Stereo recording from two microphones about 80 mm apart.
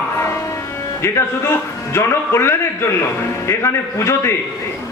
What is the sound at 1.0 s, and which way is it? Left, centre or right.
Speech, left.